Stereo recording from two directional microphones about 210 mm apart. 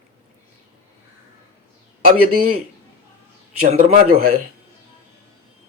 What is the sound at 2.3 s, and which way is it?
Speech, 90° right.